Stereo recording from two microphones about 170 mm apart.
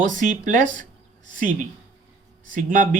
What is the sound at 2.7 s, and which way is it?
Speech, 50° right (ahead or behind).